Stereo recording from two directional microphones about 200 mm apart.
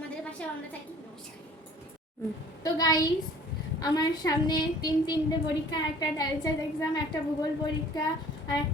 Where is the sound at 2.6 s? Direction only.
20° left (ahead or behind).